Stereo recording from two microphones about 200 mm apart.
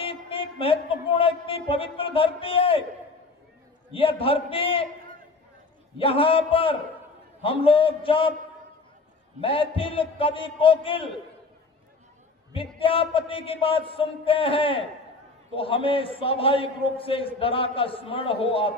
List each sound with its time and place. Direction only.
0.0 s speech: 25° left (ahead or behind)
3.9 s a man's voice: 25° left (ahead or behind)
6.0 s a man's voice: 25° left (ahead or behind)
9.4 s a man's voice: 25° left (ahead or behind)
12.5 s a man's voice: 25° left (ahead or behind)